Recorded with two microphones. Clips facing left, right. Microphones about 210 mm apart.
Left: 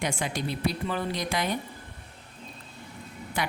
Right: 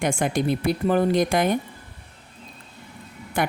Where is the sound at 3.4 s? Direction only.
50° right (ahead or behind).